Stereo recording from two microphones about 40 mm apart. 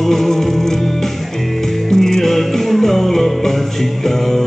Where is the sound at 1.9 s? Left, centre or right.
Centre.